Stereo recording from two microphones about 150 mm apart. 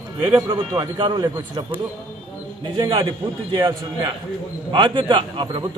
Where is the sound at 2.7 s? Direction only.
25° right (ahead or behind).